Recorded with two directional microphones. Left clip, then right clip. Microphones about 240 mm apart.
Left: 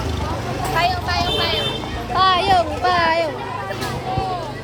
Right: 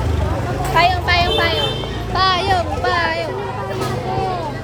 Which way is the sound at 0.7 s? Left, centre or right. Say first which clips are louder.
Right 5 dB; right.